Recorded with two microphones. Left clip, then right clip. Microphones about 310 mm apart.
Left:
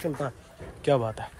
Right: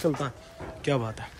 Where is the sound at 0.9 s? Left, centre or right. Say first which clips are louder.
Left 4 dB; centre.